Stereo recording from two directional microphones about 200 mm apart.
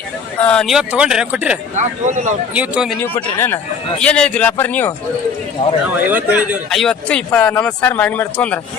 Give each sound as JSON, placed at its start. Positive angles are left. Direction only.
{"t": 0.3, "sound": "a man's voice", "side_deg": 5}
{"t": 1.7, "sound": "speech", "side_deg": -35}
{"t": 2.6, "sound": "a man's voice", "side_deg": -5}
{"t": 3.2, "sound": "a man's voice", "side_deg": 10}
{"t": 6.1, "sound": "a man's voice", "side_deg": -10}